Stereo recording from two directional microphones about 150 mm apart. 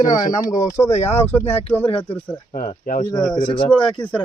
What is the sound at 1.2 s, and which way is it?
Speech, 15° left (ahead or behind).